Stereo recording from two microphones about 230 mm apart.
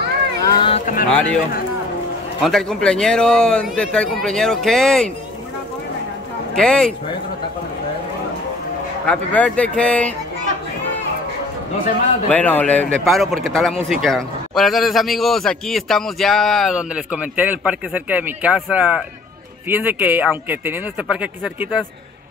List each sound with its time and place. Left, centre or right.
0.5 s a sound: left
1.1 s a man's voice: centre
2.4 s a man's voice: centre
6.5 s a man's voice: centre
9.0 s a man's voice: centre
12.3 s a man's voice: centre